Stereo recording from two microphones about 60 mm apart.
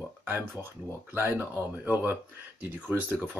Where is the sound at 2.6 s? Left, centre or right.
Right.